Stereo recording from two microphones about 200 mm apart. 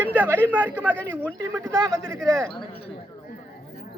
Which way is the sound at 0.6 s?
10° right (ahead or behind).